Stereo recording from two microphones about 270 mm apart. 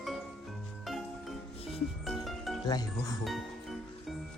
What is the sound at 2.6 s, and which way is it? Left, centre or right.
Speech, centre.